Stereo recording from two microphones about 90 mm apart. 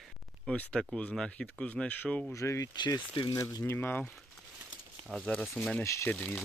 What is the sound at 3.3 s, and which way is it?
Speech, 35° left (ahead or behind).